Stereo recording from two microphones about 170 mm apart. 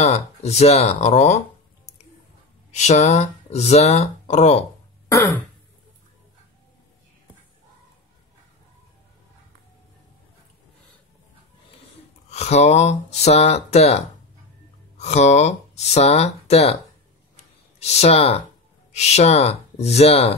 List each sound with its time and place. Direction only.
0.0 s speech: 40° left (ahead or behind)
2.7 s speech: 40° left (ahead or behind)
12.3 s speech: 40° left (ahead or behind)
17.7 s speech: 40° left (ahead or behind)